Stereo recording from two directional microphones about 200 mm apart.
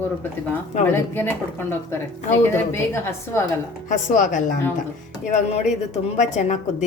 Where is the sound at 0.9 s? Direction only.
10° left (ahead or behind).